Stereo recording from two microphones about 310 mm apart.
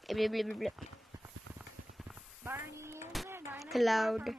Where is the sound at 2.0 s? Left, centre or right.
Centre.